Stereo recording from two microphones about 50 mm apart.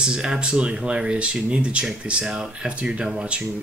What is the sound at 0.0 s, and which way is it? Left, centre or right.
Speech, centre.